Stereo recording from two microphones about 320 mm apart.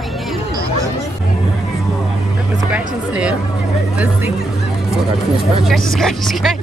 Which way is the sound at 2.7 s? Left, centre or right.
Centre.